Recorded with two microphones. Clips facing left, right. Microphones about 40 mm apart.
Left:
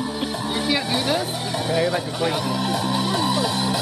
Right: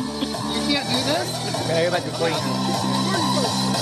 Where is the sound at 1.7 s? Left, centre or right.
Centre.